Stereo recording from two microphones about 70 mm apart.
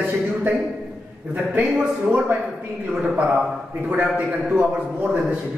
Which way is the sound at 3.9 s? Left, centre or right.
Right.